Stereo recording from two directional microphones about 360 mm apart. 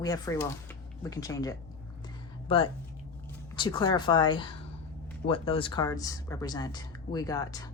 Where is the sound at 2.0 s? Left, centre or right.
Centre.